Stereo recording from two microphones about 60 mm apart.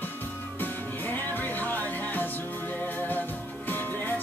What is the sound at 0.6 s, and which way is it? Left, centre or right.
Music, left.